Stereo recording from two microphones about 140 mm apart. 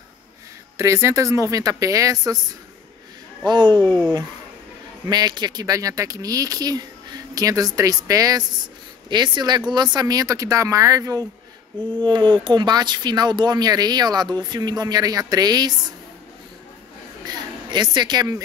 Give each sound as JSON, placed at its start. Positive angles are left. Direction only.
{"t": 0.7, "sound": "speech", "side_deg": -20}
{"t": 3.4, "sound": "speech", "side_deg": -35}
{"t": 5.0, "sound": "speech", "side_deg": -30}
{"t": 11.7, "sound": "speech", "side_deg": -35}
{"t": 17.2, "sound": "a woman's voice", "side_deg": -30}